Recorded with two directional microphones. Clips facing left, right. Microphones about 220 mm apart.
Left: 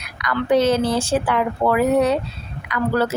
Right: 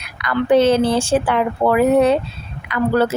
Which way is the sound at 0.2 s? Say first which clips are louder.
Right 1 dB; 30° right (ahead or behind).